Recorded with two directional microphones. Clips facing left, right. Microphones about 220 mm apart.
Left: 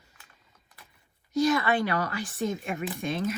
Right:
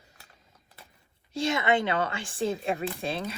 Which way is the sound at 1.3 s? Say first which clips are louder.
Left 2 dB; 25° right (ahead or behind).